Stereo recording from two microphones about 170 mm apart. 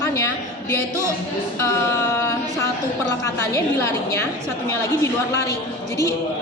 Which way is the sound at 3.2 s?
15° left (ahead or behind).